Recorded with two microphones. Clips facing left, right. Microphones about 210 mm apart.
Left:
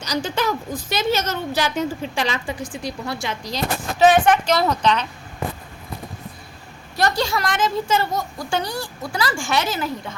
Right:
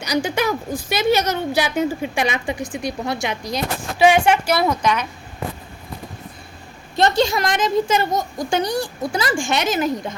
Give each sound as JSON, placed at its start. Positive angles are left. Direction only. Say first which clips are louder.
{"t": 0.0, "sound": "a woman's voice", "louder": "right 3 dB", "side_deg": -10}
{"t": 7.0, "sound": "a child's voice", "louder": "right 4 dB", "side_deg": -20}